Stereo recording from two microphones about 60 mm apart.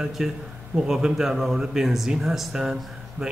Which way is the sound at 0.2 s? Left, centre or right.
Centre.